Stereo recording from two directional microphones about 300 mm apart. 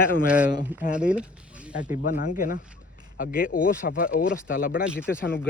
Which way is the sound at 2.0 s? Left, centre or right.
Left.